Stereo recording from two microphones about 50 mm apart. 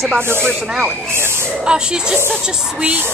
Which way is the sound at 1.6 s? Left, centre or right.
Centre.